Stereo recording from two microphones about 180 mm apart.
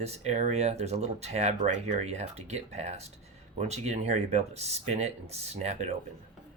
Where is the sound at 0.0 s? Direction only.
35° right (ahead or behind).